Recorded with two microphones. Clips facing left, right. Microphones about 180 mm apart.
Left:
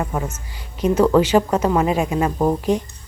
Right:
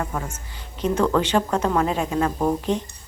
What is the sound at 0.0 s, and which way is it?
A woman's voice, 20° left (ahead or behind).